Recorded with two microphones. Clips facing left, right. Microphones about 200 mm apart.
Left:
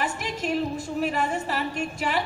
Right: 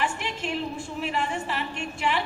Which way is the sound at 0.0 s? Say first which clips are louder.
Left 1 dB; 40° left (ahead or behind).